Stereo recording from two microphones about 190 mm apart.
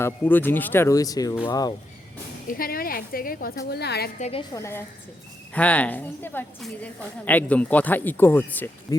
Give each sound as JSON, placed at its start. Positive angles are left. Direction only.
{"t": 0.0, "sound": "a woman's voice", "side_deg": 10}
{"t": 2.5, "sound": "a woman's voice", "side_deg": 50}
{"t": 4.2, "sound": "a woman's voice", "side_deg": 30}
{"t": 4.5, "sound": "a woman's voice", "side_deg": 15}